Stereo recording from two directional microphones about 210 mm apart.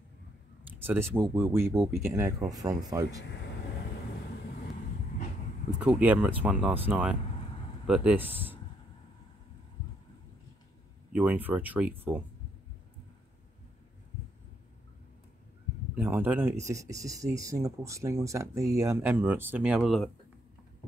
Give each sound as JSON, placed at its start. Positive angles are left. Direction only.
{"t": 0.7, "sound": "speech", "side_deg": -10}
{"t": 5.8, "sound": "speech", "side_deg": -5}
{"t": 11.1, "sound": "speech", "side_deg": -10}
{"t": 15.9, "sound": "a man's voice", "side_deg": -10}